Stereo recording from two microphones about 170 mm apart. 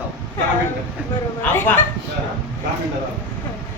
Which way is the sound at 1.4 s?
10° left (ahead or behind).